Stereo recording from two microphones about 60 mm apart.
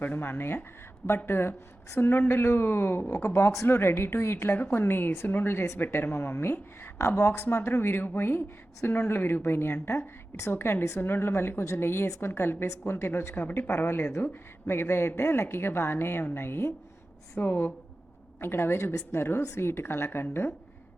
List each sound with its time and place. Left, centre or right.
0.0 s a woman's voice: left
3.2 s speech: left
3.8 s a woman's voice: left
17.4 s a woman's voice: left